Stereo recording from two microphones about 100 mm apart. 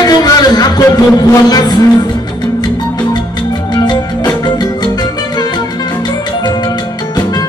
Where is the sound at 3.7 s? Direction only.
45° left (ahead or behind).